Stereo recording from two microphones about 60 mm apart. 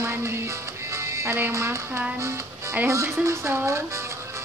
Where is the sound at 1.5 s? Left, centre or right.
Right.